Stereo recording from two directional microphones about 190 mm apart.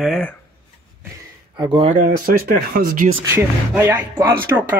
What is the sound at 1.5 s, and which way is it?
Speech, 30° right (ahead or behind).